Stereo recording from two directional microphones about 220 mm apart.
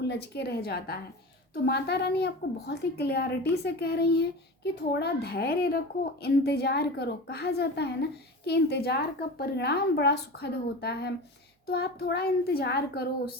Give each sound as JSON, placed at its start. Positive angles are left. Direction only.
{"t": 0.1, "sound": "a woman's voice", "side_deg": 45}